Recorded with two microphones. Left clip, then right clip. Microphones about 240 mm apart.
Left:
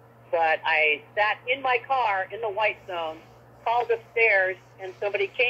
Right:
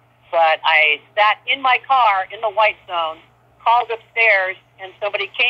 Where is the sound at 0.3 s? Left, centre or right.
Centre.